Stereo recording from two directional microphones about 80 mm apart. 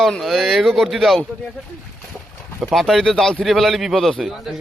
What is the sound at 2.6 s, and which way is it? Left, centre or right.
A man's voice, centre.